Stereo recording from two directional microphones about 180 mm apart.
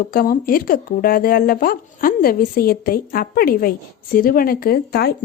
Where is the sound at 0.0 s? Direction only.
55° left (ahead or behind).